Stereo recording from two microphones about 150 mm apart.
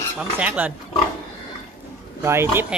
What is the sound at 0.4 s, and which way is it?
Speech, 10° right (ahead or behind).